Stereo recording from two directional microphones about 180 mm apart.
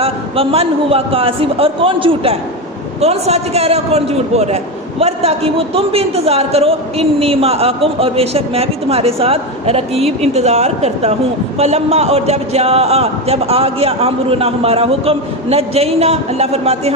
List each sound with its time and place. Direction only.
0.0 s a man's voice: 35° right (ahead or behind)